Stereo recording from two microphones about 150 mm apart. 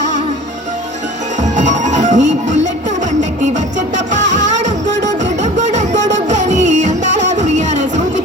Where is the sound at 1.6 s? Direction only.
55° right (ahead or behind).